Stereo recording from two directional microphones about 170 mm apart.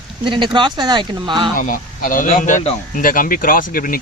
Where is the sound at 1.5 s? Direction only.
50° left (ahead or behind).